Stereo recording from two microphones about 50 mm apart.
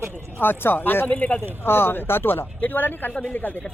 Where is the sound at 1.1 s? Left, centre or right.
Left.